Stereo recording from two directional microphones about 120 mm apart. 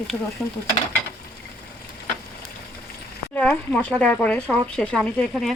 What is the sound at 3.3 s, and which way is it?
Speech, 10° left (ahead or behind).